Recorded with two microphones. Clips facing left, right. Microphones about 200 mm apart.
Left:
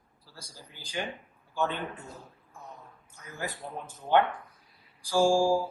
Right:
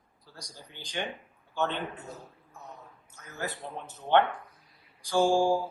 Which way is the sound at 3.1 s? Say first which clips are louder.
Right 1 dB; 10° left (ahead or behind).